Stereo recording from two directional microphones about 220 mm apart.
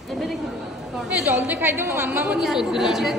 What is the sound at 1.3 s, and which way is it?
A woman's voice, 10° right (ahead or behind).